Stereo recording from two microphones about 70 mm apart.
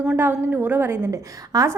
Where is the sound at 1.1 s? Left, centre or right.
Right.